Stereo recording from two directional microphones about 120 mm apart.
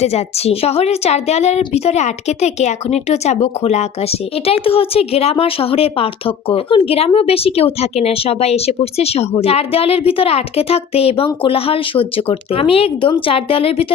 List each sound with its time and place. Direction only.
0.0 s a woman's voice: 60° left (ahead or behind)